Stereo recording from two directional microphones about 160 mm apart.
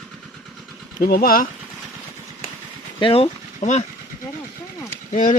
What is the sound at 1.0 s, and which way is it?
Speech, 70° left (ahead or behind).